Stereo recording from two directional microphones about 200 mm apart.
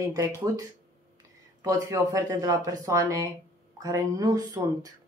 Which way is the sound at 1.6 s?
15° right (ahead or behind).